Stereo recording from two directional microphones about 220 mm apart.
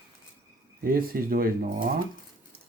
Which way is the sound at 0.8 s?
40° right (ahead or behind).